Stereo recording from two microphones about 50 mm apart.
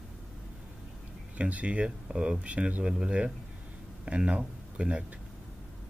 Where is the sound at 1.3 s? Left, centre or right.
Right.